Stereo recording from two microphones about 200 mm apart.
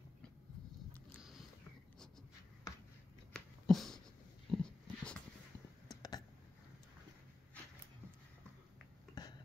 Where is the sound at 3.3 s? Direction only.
Centre (ahead or behind).